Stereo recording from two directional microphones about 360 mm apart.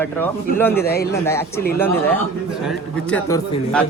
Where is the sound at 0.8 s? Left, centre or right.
Left.